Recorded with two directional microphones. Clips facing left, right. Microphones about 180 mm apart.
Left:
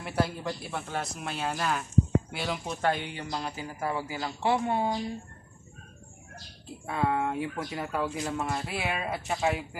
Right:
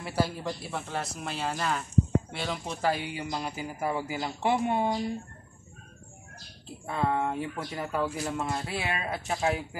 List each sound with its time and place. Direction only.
0.0 s speech: centre (ahead or behind); by 4.8 s 15° right (ahead or behind)
6.9 s speech: 5° left (ahead or behind)